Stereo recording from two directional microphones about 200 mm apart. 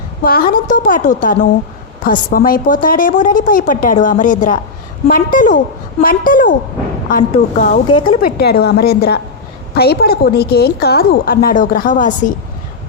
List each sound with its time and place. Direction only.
0.2 s a woman's voice: 45° left (ahead or behind)